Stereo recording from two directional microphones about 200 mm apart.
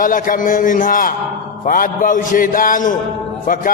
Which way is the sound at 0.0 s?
45° left (ahead or behind).